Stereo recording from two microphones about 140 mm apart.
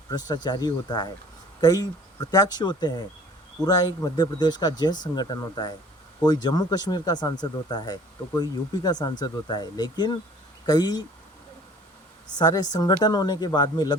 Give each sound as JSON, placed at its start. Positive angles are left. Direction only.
{"t": 0.1, "sound": "speech", "side_deg": 30}
{"t": 12.4, "sound": "speech", "side_deg": 30}